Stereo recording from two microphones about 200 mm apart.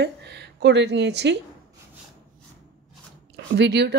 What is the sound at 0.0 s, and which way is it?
A woman's voice, 60° right (ahead or behind).